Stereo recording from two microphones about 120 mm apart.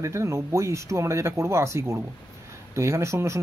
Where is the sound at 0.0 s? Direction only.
25° right (ahead or behind).